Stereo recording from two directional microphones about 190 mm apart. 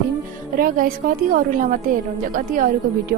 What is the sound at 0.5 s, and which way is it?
A woman's voice, 50° right (ahead or behind).